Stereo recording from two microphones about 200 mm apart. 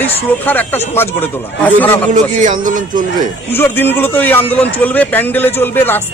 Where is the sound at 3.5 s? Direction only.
10° left (ahead or behind).